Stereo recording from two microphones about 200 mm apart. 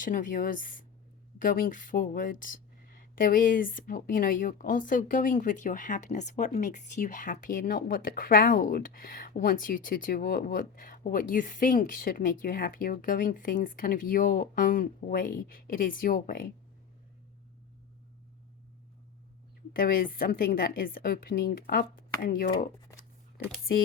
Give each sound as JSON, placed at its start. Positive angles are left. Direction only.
{"t": 0.0, "sound": "speech", "side_deg": 40}
{"t": 19.7, "sound": "speech", "side_deg": 45}